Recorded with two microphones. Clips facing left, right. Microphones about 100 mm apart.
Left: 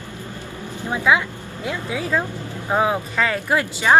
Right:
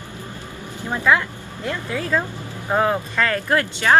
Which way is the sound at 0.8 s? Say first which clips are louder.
Even; 10° left (ahead or behind).